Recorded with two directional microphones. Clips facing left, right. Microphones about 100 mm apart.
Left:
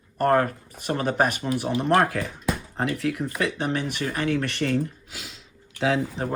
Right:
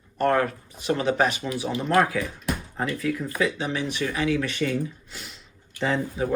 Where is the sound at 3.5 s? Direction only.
55° left (ahead or behind).